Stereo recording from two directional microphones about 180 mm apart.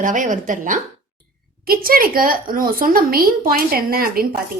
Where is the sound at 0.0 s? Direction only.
45° right (ahead or behind).